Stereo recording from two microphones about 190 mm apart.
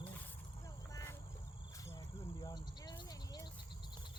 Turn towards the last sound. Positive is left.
turn(degrees=20)  # may be behind; listen again after turning